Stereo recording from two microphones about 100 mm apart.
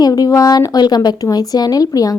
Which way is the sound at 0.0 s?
35° left (ahead or behind).